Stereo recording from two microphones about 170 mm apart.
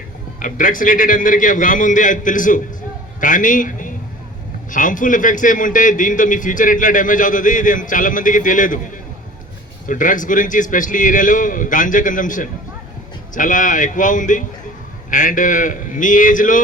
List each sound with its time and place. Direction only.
0.3 s a man's voice: 50° left (ahead or behind)
9.8 s a man's voice: 50° left (ahead or behind)